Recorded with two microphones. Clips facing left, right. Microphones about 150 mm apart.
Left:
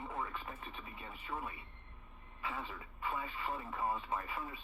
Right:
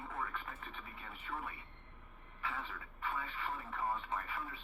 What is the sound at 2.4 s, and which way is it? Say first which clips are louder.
Speech: left 1 dB; 15° left (ahead or behind).